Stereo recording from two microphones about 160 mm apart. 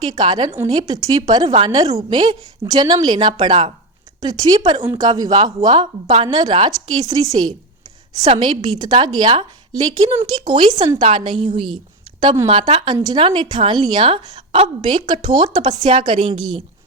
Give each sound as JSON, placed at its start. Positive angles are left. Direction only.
{"t": 0.1, "sound": "a woman's voice", "side_deg": -25}
{"t": 1.5, "sound": "a woman's voice", "side_deg": -35}
{"t": 1.8, "sound": "a woman's voice", "side_deg": -20}
{"t": 8.2, "sound": "a woman's voice", "side_deg": -35}
{"t": 15.8, "sound": "a woman's voice", "side_deg": -35}